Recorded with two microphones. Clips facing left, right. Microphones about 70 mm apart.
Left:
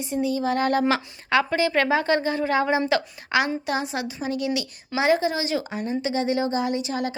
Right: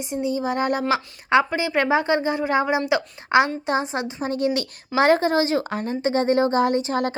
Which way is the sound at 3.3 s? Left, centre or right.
Right.